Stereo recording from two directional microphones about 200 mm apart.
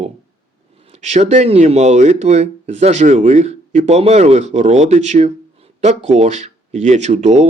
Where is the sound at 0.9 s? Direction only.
35° right (ahead or behind).